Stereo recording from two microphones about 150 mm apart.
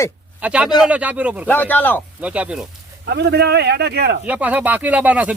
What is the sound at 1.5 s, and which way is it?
Speech, 10° left (ahead or behind).